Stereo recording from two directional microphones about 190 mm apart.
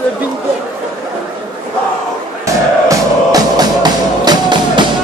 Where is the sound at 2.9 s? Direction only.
20° right (ahead or behind).